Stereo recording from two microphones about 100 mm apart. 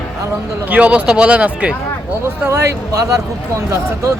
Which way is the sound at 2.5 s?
35° right (ahead or behind).